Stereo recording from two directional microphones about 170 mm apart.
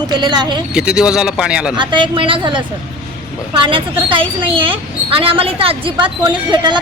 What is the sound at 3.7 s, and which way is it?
A woman's voice, 30° right (ahead or behind).